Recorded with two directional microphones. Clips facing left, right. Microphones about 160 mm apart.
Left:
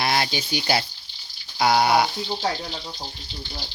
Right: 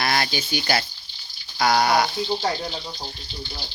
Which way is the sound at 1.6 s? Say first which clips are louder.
Left 1 dB; 5° left (ahead or behind).